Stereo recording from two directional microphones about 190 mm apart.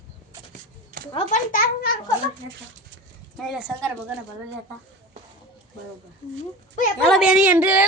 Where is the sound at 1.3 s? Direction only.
50° left (ahead or behind).